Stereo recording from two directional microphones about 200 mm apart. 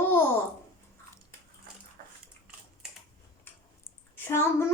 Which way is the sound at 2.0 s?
45° right (ahead or behind).